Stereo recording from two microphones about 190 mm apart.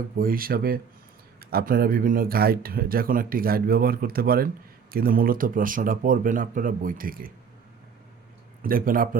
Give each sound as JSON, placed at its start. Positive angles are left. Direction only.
{"t": 0.2, "sound": "speech", "side_deg": -50}
{"t": 8.6, "sound": "speech", "side_deg": -50}